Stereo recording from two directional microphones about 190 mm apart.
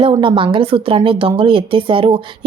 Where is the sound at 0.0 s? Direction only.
25° right (ahead or behind).